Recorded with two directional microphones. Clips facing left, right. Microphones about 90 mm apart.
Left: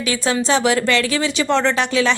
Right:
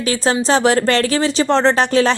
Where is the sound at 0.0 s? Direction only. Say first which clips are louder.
Right 3 dB; 40° right (ahead or behind).